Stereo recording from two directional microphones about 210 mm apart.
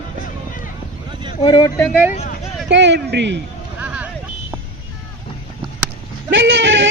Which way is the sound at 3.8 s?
5° right (ahead or behind).